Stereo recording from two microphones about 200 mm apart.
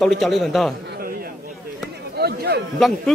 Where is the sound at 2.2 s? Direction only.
50° right (ahead or behind).